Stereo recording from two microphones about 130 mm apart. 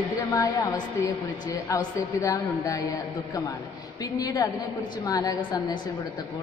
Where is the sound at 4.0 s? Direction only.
30° left (ahead or behind).